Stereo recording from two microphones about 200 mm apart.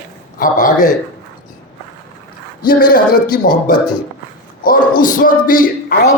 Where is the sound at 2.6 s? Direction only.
45° left (ahead or behind).